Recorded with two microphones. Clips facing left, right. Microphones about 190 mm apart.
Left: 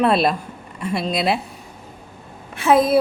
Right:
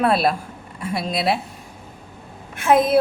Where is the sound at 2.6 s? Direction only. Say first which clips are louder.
Left 1 dB; centre (ahead or behind).